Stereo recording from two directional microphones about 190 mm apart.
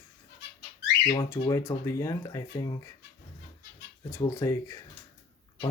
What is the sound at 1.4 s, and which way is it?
Speech, 15° left (ahead or behind).